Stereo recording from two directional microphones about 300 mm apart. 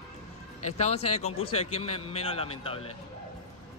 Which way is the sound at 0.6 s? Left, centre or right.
Left.